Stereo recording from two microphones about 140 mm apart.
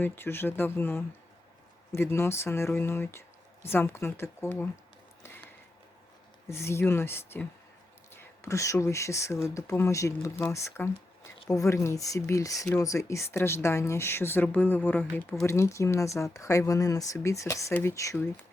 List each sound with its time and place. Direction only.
0.0 s speech: 15° left (ahead or behind)
6.5 s speech: 20° left (ahead or behind)